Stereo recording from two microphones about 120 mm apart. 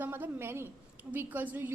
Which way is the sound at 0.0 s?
15° right (ahead or behind).